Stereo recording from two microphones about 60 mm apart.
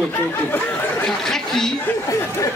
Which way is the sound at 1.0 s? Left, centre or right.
Centre.